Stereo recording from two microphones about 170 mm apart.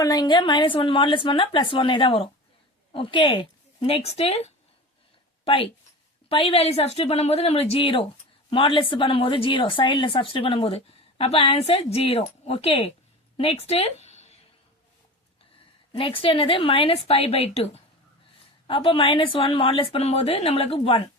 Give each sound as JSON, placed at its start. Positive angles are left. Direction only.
{"t": 0.0, "sound": "a woman's voice", "side_deg": 20}
{"t": 6.2, "sound": "a woman's voice", "side_deg": 35}
{"t": 15.9, "sound": "a woman's voice", "side_deg": 30}
{"t": 18.7, "sound": "a woman's voice", "side_deg": 30}